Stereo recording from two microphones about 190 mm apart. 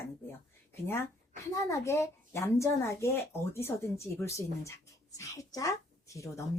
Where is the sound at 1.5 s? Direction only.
15° left (ahead or behind).